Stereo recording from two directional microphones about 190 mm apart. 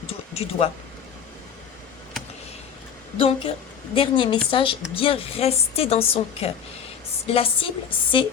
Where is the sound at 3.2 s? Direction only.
30° left (ahead or behind).